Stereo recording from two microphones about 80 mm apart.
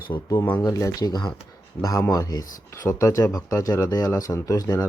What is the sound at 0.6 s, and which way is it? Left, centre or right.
Speech, left.